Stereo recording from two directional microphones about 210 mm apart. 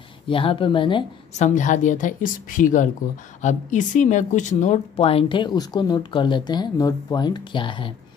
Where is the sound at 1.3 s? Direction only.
35° left (ahead or behind).